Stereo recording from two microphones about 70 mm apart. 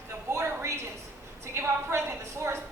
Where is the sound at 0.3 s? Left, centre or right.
Right.